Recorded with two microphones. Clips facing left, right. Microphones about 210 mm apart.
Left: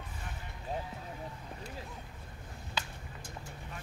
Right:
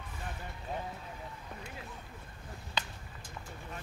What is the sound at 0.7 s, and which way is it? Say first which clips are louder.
Vehicle: left 1 dB; 35° left (ahead or behind).